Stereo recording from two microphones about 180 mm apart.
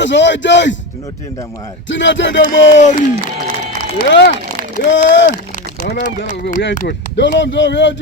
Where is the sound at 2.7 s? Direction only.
45° left (ahead or behind).